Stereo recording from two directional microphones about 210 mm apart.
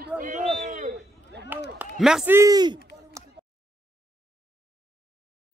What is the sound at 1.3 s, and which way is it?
Speech, 55° right (ahead or behind).